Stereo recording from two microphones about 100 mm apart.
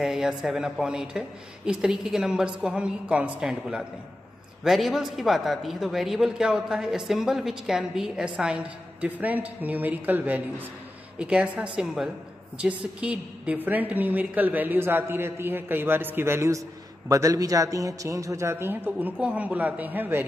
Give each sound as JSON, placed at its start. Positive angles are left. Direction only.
{"t": 0.0, "sound": "a man's voice", "side_deg": -5}